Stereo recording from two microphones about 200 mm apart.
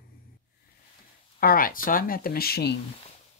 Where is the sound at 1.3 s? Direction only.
45° left (ahead or behind).